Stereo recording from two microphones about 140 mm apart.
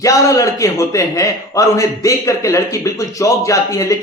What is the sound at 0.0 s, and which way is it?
A man's voice, 25° left (ahead or behind).